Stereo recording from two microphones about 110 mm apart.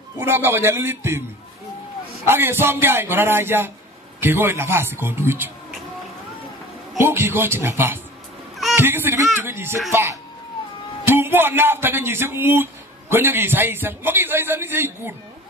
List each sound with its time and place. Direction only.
0.2 s a man's voice: 20° right (ahead or behind)
2.2 s a man's voice: 20° right (ahead or behind)
7.0 s a man's voice: 20° right (ahead or behind)
11.1 s a man's voice: 20° right (ahead or behind)